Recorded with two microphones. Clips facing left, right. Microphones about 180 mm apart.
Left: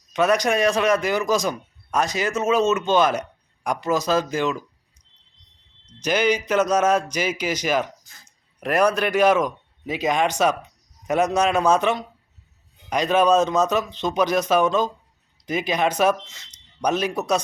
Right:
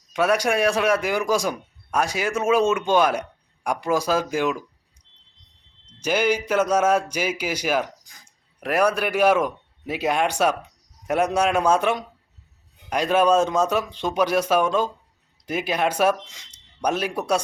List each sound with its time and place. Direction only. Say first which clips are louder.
0.1 s speech: left 1 dB; 10° right (ahead or behind)
6.0 s speech: left 1 dB; 10° right (ahead or behind)